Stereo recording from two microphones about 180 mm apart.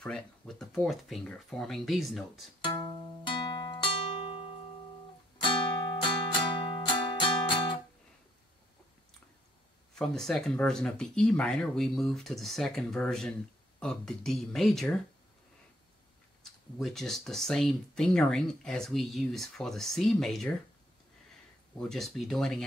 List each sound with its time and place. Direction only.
0.0 s speech: 5° left (ahead or behind)
2.6 s music: 20° left (ahead or behind)
6.0 s music: 25° left (ahead or behind)
9.9 s speech: centre (ahead or behind)
16.7 s speech: centre (ahead or behind)
21.7 s speech: centre (ahead or behind)